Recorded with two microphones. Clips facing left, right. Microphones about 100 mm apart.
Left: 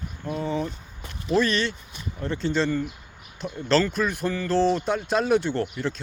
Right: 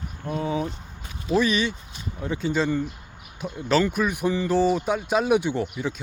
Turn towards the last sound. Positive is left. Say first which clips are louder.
# even
turn(degrees=-10)  # may be behind; listen again after turning